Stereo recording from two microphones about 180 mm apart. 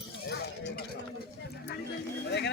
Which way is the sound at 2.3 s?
70° left (ahead or behind).